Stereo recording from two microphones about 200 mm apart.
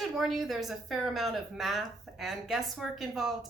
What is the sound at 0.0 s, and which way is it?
A woman's voice, centre (ahead or behind).